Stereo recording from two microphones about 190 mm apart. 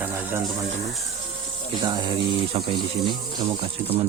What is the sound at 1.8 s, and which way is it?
Speech, 25° right (ahead or behind).